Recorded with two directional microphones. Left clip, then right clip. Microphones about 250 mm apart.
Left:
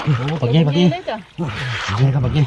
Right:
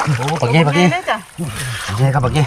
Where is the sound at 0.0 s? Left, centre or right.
Centre.